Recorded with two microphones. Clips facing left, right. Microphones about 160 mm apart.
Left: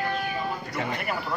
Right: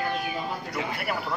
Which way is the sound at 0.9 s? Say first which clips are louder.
Even; 10° right (ahead or behind).